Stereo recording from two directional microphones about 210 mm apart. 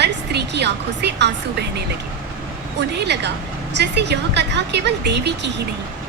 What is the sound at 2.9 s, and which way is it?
A woman's voice, 55° right (ahead or behind).